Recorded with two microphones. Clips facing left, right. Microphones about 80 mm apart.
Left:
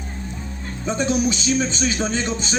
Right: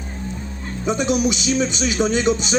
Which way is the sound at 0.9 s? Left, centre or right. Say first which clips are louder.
Right 2 dB; centre.